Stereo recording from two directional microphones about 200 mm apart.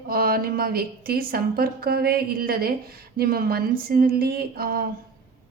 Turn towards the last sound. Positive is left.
turn(degrees=-50)  # may be behind; listen again after turning